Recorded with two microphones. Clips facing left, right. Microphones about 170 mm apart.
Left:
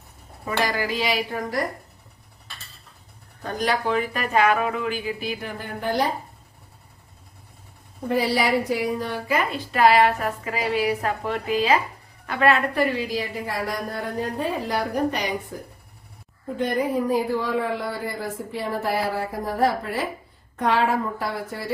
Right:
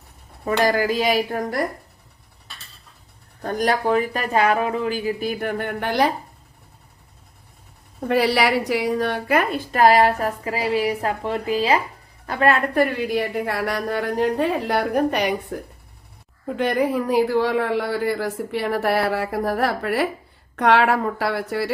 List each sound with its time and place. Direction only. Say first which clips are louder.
0.4 s a woman's voice: right 6 dB; 45° right (ahead or behind)
3.4 s speech: right 4 dB; 45° right (ahead or behind); by 6.1 s 75° right (ahead or behind)
8.0 s a woman's voice: right 3 dB; 70° right (ahead or behind)
16.6 s speech: right 2 dB; 75° right (ahead or behind)